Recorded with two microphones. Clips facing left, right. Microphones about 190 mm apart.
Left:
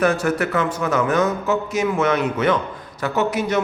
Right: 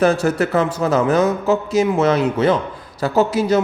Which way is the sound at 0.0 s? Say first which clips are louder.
Right 3 dB; 30° right (ahead or behind).